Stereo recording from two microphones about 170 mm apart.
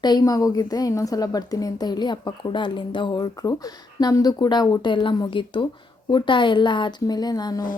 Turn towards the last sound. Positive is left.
turn(degrees=25)  # may be behind; listen again after turning